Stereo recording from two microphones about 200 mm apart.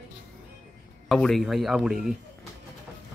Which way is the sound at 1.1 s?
Centre (ahead or behind).